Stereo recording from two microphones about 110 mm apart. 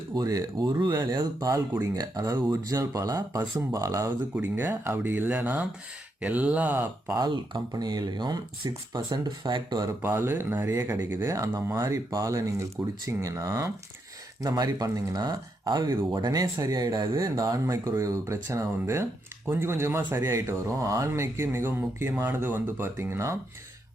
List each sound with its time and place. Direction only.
0.1 s speech: 35° right (ahead or behind)
4.4 s speech: 20° right (ahead or behind)
7.2 s speech: 35° right (ahead or behind)
10.0 s speech: 20° right (ahead or behind)